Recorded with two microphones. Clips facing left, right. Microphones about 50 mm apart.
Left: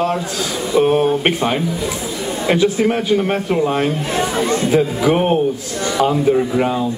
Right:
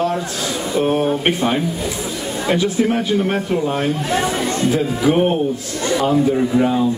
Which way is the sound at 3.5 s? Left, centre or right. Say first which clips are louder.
Left 2 dB; left.